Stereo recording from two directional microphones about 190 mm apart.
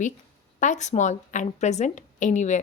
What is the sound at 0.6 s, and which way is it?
A woman's voice, 40° left (ahead or behind).